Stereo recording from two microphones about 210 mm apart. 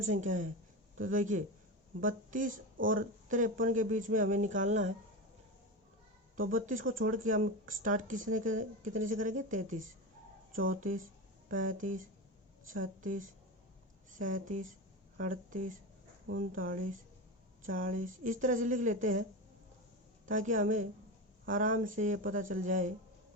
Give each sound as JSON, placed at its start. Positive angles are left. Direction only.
{"t": 0.0, "sound": "speech", "side_deg": -35}
{"t": 6.3, "sound": "speech", "side_deg": -40}
{"t": 20.2, "sound": "speech", "side_deg": -40}